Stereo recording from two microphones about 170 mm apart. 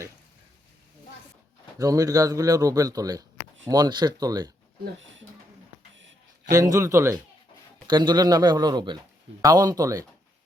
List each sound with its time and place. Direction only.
1.8 s speech: 20° right (ahead or behind)
6.5 s speech: 20° right (ahead or behind)